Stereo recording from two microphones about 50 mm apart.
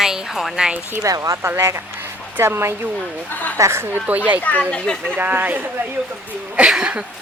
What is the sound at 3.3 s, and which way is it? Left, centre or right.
Speech, left.